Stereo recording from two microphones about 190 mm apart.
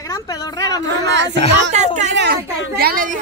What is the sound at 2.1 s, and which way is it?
A woman's voice, 60° right (ahead or behind).